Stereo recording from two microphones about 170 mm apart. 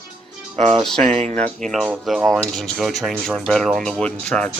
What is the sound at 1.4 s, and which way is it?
Speech, centre (ahead or behind).